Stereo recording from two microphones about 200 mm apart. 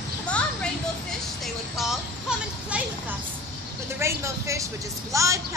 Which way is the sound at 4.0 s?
15° right (ahead or behind).